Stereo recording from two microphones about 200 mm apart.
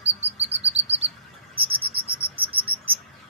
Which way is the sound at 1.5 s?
25° right (ahead or behind).